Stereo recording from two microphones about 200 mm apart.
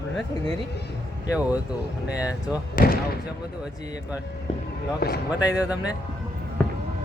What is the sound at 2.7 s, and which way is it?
Speech, 50° left (ahead or behind).